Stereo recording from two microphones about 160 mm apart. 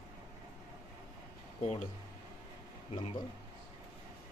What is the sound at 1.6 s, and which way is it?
Speech, 50° left (ahead or behind).